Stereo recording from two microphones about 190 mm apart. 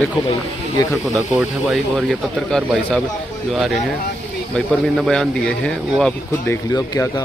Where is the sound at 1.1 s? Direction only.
Centre (ahead or behind).